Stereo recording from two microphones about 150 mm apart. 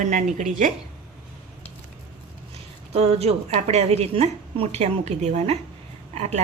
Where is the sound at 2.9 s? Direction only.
45° right (ahead or behind).